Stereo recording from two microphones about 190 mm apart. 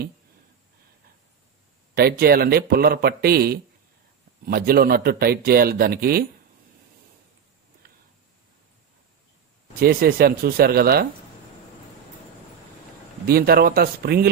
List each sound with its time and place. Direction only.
2.0 s a man's voice: 55° right (ahead or behind)
9.8 s a man's voice: 50° right (ahead or behind)
13.3 s a man's voice: 55° right (ahead or behind)